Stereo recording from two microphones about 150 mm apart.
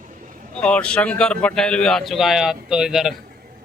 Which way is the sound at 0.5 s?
5° left (ahead or behind).